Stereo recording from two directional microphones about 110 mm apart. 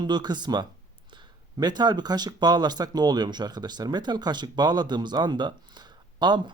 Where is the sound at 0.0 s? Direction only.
40° right (ahead or behind).